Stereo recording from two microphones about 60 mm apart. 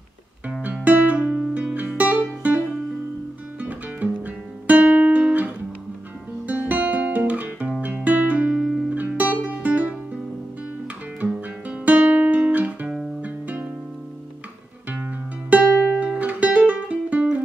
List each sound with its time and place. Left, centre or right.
0.8 s music: right
3.6 s guitar: right
7.8 s music: right
8.5 s music: centre
8.9 s music: right
11.8 s guitar: right
13.2 s music: right
15.5 s music: right